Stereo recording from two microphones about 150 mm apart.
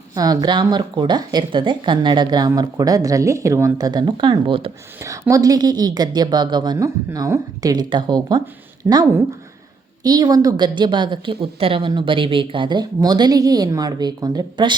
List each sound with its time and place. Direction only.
0.2 s a woman's voice: 25° right (ahead or behind)
5.3 s a woman's voice: 25° right (ahead or behind)
10.0 s a woman's voice: 25° right (ahead or behind)